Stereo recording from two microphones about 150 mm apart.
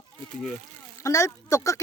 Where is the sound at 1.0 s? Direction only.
20° left (ahead or behind).